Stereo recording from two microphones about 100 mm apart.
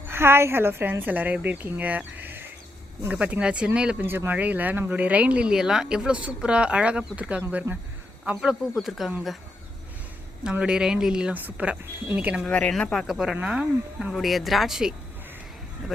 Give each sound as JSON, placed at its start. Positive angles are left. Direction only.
{"t": 0.1, "sound": "a woman's voice", "side_deg": -25}
{"t": 4.0, "sound": "speech", "side_deg": -20}
{"t": 7.7, "sound": "a woman's voice", "side_deg": -30}
{"t": 8.3, "sound": "speech", "side_deg": -5}
{"t": 10.4, "sound": "speech", "side_deg": -10}
{"t": 12.4, "sound": "speech", "side_deg": 10}
{"t": 14.1, "sound": "speech", "side_deg": 0}